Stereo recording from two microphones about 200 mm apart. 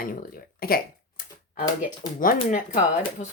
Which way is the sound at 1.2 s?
45° left (ahead or behind).